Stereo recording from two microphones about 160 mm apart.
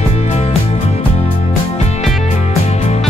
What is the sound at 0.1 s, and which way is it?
Music, 40° left (ahead or behind).